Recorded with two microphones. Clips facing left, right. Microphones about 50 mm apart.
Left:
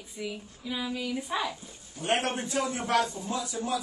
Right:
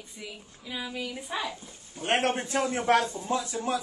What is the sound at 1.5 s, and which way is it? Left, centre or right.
A man's voice, right.